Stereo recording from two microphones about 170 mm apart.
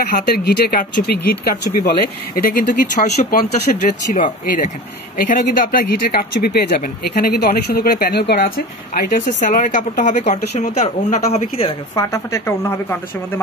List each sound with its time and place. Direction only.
0.0 s speech: 65° left (ahead or behind); by 11.7 s 35° left (ahead or behind)
11.9 s a woman's voice: 20° left (ahead or behind)